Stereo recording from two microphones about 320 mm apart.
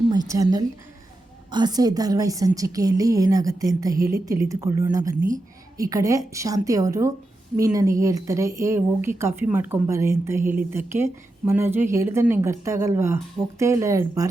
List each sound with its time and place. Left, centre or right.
0.1 s a woman's voice: centre
5.1 s a woman's voice: right
5.7 s a woman's voice: centre